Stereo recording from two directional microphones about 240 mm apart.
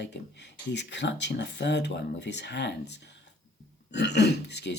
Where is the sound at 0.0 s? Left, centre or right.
Left.